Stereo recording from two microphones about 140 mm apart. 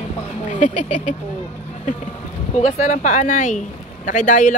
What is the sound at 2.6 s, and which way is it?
Speech, 50° left (ahead or behind).